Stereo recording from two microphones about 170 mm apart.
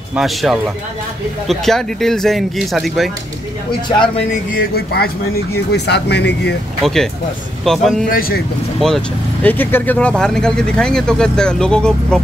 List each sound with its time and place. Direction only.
0.1 s speech: centre (ahead or behind)
4.6 s speech: 65° left (ahead or behind)
5.7 s speech: 75° left (ahead or behind)
6.8 s speech: centre (ahead or behind)
8.1 s speech: 60° left (ahead or behind)
8.7 s speech: centre (ahead or behind)